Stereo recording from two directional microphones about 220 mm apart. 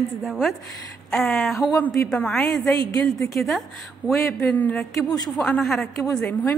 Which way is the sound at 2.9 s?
15° left (ahead or behind).